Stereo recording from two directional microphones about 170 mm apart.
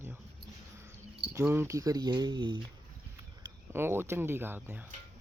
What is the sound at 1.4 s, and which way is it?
Speech, 15° right (ahead or behind).